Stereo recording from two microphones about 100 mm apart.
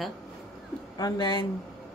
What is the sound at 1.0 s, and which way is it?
Speech, 45° left (ahead or behind).